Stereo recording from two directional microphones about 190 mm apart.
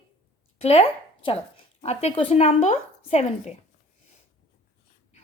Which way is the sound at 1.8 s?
35° left (ahead or behind).